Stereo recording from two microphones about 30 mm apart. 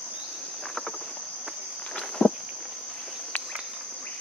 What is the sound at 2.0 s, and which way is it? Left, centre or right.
Walk, left.